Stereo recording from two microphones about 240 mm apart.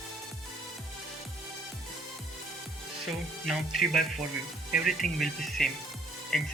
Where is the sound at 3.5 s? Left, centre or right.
Centre.